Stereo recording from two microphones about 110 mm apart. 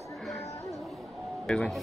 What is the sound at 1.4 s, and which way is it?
Speech, 5° left (ahead or behind).